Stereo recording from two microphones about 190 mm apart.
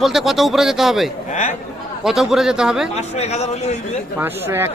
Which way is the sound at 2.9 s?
35° left (ahead or behind).